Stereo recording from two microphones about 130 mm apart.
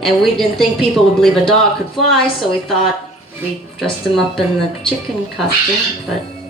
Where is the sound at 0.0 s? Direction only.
Centre (ahead or behind).